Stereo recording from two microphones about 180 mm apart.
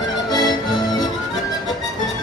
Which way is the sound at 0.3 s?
25° left (ahead or behind).